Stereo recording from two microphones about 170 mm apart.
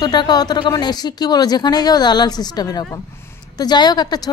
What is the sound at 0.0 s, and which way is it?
A woman's voice, 25° left (ahead or behind).